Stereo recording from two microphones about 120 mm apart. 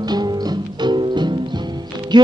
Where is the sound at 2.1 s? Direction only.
40° right (ahead or behind).